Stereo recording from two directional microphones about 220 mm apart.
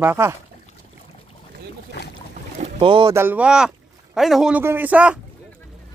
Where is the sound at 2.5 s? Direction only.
25° right (ahead or behind).